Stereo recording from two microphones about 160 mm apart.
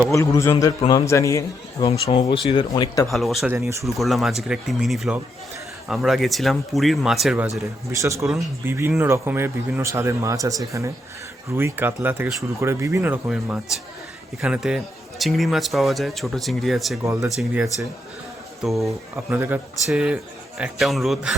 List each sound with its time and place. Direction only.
0.1 s a man's voice: 20° left (ahead or behind)
1.9 s speech: 40° left (ahead or behind)
2.5 s a man's voice: 25° left (ahead or behind)
3.1 s speech: centre (ahead or behind)
3.5 s speech: 20° right (ahead or behind)
3.8 s speech: centre (ahead or behind)
7.9 s speech: 20° right (ahead or behind)
13.2 s speech: 5° right (ahead or behind)
17.0 s speech: 20° right (ahead or behind)
17.2 s speech: 5° right (ahead or behind)
19.1 s speech: 15° right (ahead or behind)